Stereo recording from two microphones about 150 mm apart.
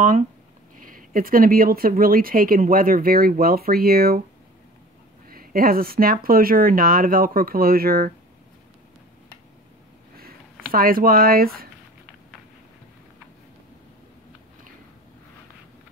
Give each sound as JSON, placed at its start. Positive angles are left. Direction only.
{"t": 0.7, "sound": "speech", "side_deg": -70}
{"t": 5.3, "sound": "speech", "side_deg": -75}
{"t": 10.7, "sound": "speech", "side_deg": -70}